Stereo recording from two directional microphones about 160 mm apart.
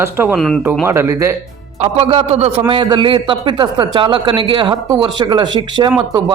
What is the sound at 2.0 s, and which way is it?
Speech, 40° right (ahead or behind).